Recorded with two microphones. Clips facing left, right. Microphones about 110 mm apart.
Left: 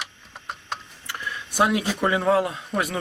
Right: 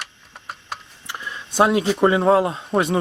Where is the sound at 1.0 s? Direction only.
20° right (ahead or behind).